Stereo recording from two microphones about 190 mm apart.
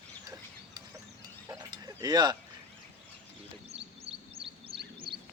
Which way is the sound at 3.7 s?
30° right (ahead or behind).